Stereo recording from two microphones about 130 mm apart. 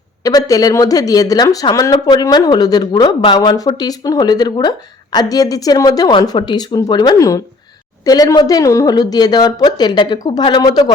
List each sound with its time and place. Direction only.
0.2 s a woman's voice: 25° left (ahead or behind)